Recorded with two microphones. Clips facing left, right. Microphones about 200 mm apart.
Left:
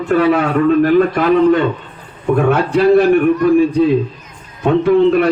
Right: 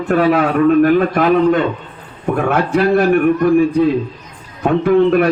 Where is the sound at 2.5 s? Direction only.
55° right (ahead or behind).